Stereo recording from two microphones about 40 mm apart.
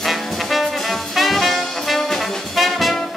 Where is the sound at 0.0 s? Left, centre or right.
Centre.